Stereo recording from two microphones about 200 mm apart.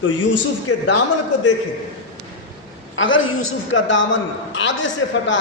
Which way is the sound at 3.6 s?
70° left (ahead or behind).